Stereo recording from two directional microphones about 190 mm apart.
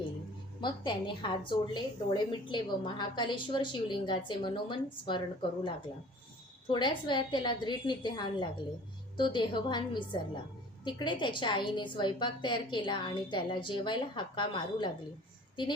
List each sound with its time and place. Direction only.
0.6 s a woman's voice: 25° left (ahead or behind)